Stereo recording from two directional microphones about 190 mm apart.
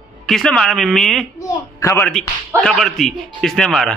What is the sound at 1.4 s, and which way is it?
Speech, 15° left (ahead or behind).